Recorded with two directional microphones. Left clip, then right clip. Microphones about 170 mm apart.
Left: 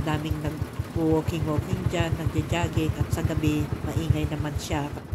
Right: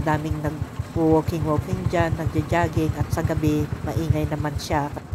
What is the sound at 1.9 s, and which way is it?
Speech, 30° right (ahead or behind).